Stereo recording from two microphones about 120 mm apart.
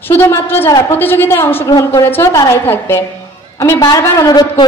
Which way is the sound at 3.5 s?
30° left (ahead or behind).